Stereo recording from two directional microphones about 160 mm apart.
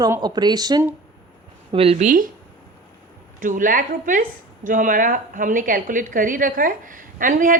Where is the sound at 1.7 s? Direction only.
40° right (ahead or behind).